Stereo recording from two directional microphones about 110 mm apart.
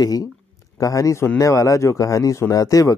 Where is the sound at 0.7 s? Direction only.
30° left (ahead or behind).